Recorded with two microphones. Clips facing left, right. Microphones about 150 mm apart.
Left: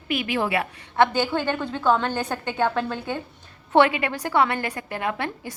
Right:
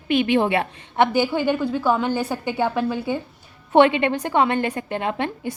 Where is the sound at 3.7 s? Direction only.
25° right (ahead or behind).